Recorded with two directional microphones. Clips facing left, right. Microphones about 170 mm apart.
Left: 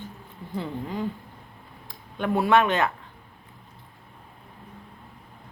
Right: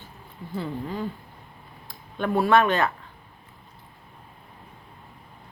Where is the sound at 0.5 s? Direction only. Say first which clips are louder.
Even; 15° left (ahead or behind).